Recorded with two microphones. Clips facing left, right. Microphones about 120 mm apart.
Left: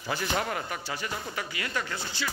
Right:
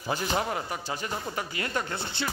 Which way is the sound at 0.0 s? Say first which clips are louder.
Right 1 dB; 15° right (ahead or behind).